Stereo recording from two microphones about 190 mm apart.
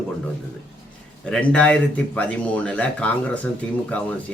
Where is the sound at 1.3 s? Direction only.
5° left (ahead or behind).